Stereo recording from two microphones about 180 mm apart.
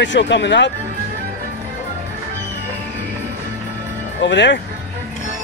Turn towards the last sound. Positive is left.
turn(degrees=80)